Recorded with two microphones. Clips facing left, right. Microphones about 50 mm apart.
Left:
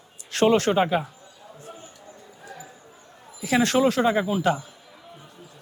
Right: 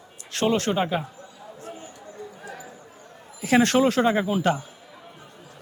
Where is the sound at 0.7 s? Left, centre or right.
Centre.